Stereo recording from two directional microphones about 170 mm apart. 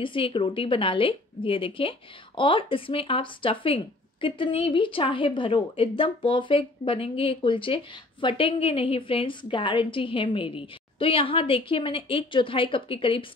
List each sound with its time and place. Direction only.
0.0 s a woman's voice: 30° left (ahead or behind)